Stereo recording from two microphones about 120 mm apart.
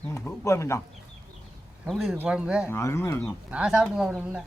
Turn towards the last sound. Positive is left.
turn(degrees=-5)  # may be behind; listen again after turning